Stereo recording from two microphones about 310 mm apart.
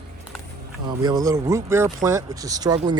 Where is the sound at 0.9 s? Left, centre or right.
Centre.